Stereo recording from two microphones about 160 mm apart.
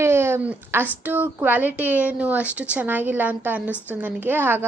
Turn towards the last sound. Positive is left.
turn(degrees=-10)  # may be behind; listen again after turning